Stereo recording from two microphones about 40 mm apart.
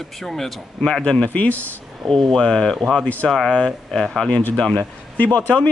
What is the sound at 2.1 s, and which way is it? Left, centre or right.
Speech, centre.